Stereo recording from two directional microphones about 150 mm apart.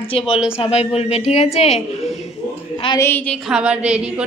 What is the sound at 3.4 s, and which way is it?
Speech, 5° right (ahead or behind).